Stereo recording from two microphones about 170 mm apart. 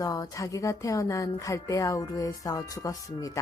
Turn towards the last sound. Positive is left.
turn(degrees=20)  # may be behind; listen again after turning